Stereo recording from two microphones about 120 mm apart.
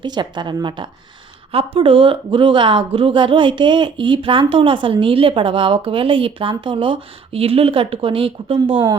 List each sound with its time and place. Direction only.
0.0 s a woman's voice: 40° right (ahead or behind)